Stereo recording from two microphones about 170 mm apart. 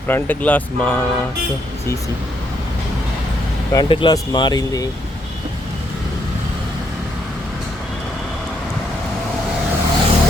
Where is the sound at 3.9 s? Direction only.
30° left (ahead or behind).